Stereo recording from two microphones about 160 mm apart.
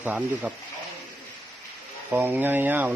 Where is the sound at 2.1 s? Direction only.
10° right (ahead or behind).